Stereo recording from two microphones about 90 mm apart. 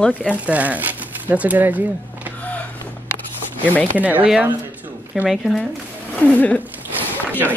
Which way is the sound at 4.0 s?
20° right (ahead or behind).